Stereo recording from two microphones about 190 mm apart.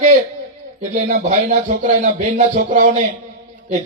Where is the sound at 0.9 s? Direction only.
40° right (ahead or behind).